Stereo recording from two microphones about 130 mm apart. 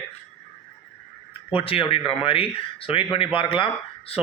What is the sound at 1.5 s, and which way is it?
Speech, 45° left (ahead or behind).